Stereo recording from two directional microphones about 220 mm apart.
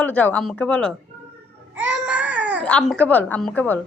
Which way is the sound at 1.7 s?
5° right (ahead or behind).